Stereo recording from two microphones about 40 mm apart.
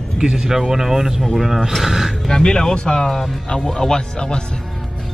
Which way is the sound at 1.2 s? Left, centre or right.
Centre.